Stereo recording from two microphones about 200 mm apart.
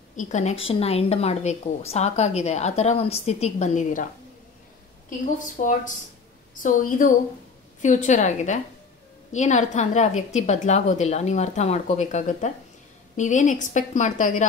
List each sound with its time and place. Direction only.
0.1 s a woman's voice: 40° left (ahead or behind)
5.6 s a woman's voice: 40° left (ahead or behind)